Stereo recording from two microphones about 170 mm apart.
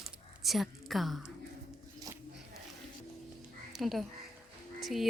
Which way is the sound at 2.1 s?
20° right (ahead or behind).